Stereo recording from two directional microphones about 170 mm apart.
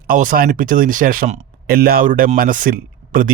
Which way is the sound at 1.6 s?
60° right (ahead or behind).